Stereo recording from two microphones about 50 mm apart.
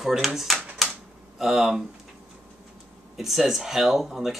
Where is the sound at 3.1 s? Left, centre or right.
Centre.